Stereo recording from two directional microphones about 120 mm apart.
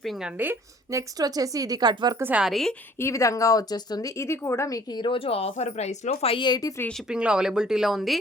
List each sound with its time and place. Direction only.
0.0 s speech: centre (ahead or behind)
0.3 s a woman's voice: 20° right (ahead or behind); by 2.1 s 40° right (ahead or behind)
2.1 s a woman's voice: 15° right (ahead or behind)
2.4 s speech: centre (ahead or behind)
3.0 s speech: 25° left (ahead or behind)
4.9 s speech: 45° left (ahead or behind); by 6.8 s 30° left (ahead or behind)
7.1 s speech: 10° right (ahead or behind)